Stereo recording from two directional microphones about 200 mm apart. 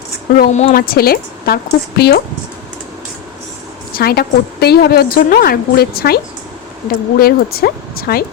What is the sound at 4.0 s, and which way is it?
Speech, 50° left (ahead or behind).